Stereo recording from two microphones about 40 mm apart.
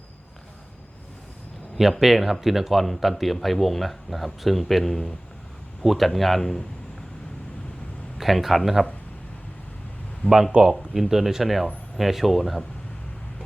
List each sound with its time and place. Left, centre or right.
1.7 s a man's voice: centre
8.2 s a man's voice: centre
10.2 s speech: left
10.6 s a man's voice: centre